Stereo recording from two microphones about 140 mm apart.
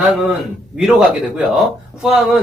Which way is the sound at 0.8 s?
5° right (ahead or behind).